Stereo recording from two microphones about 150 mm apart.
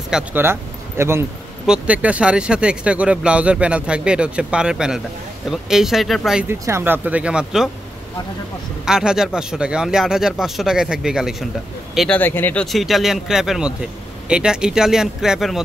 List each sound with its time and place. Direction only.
0.1 s speech: 15° right (ahead or behind)
6.4 s speech: 15° right (ahead or behind)
8.8 s speech: 5° right (ahead or behind)
12.2 s speech: 15° left (ahead or behind)
12.6 s speech: centre (ahead or behind)